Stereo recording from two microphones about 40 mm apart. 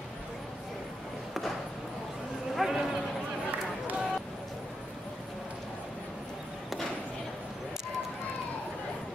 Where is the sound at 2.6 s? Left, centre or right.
Centre.